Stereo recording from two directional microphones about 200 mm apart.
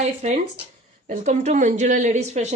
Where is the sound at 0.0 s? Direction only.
35° right (ahead or behind).